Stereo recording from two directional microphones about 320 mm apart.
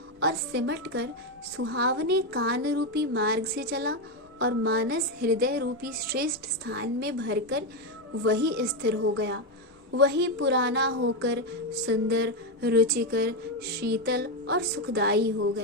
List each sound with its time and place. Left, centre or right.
0.2 s a woman's voice: right